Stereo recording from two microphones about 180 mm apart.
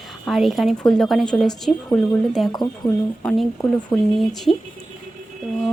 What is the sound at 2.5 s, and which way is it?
Speech, 25° left (ahead or behind).